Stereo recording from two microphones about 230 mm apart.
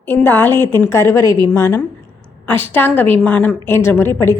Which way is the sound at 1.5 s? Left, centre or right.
Centre.